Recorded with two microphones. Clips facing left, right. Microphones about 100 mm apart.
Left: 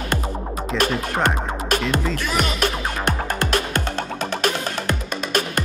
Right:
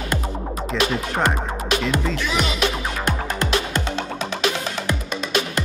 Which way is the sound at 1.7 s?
50° left (ahead or behind).